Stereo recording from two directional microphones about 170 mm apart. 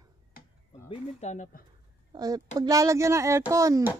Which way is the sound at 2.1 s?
20° right (ahead or behind).